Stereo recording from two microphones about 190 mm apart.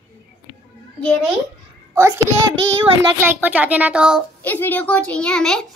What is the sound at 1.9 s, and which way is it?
Speech, 15° right (ahead or behind).